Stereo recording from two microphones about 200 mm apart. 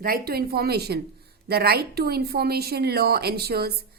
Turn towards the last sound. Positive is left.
turn(degrees=-50)  # may be behind; listen again after turning